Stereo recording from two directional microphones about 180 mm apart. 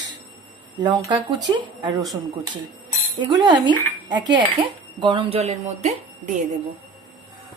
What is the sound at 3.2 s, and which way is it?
Speech, 25° right (ahead or behind).